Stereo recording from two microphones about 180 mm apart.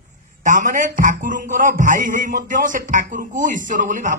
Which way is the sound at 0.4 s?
45° right (ahead or behind).